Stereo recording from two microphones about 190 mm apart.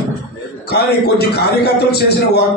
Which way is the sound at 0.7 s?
55° left (ahead or behind).